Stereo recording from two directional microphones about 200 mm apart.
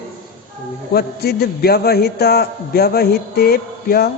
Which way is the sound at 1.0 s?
50° left (ahead or behind).